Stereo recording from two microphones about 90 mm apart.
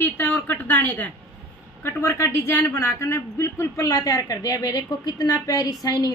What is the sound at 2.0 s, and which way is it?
A woman's voice, 35° left (ahead or behind).